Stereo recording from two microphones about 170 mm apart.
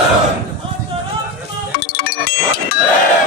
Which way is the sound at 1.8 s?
60° left (ahead or behind).